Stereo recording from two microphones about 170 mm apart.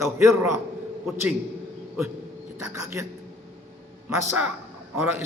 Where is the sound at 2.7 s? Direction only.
15° right (ahead or behind).